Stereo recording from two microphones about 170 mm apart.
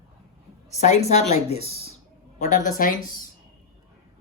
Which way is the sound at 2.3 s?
45° left (ahead or behind).